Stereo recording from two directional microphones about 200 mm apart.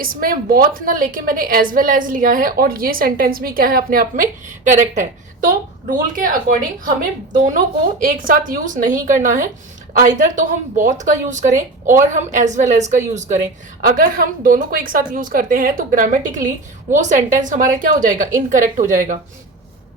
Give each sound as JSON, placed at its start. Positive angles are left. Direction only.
{"t": 0.0, "sound": "a woman's voice", "side_deg": -45}